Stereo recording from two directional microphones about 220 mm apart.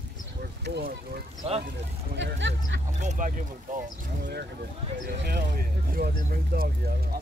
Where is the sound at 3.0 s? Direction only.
35° right (ahead or behind).